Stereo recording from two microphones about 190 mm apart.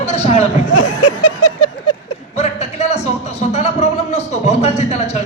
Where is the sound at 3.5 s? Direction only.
35° left (ahead or behind).